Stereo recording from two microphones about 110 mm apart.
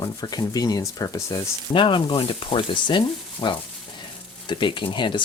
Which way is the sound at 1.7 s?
50° left (ahead or behind).